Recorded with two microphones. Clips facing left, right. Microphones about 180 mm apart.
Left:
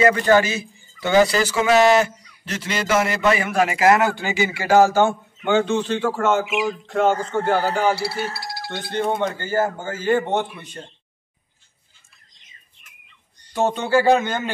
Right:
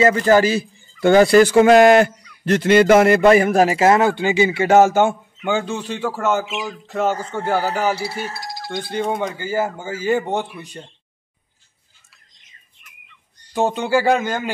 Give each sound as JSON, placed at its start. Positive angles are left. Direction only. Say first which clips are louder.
{"t": 0.0, "sound": "speech", "louder": "right 2 dB", "side_deg": -30}
{"t": 0.9, "sound": "speech", "louder": "right 6 dB", "side_deg": -55}
{"t": 6.4, "sound": "a sound", "louder": "left 5 dB", "side_deg": 15}
{"t": 6.9, "sound": "a man's voice", "louder": "left 1 dB", "side_deg": -5}
{"t": 9.4, "sound": "a man's voice", "louder": "even", "side_deg": -10}
{"t": 13.5, "sound": "a man's voice", "louder": "right 1 dB", "side_deg": -15}